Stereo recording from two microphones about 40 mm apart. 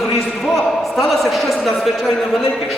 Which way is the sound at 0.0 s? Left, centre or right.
Centre.